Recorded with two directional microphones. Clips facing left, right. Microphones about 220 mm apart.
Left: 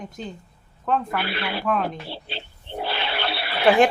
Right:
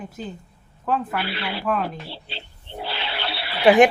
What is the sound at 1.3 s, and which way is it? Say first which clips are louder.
Speech: left 1 dB; 55° left (ahead or behind).